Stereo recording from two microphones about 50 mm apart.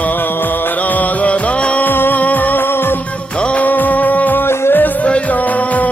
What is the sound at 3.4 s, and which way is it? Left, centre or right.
Music, left.